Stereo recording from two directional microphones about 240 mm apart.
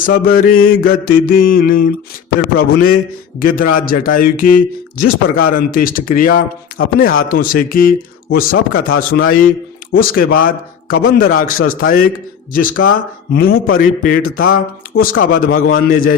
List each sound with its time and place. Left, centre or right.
0.0 s speech: left